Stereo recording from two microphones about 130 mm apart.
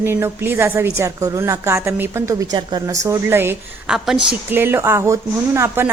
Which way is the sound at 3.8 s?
5° right (ahead or behind).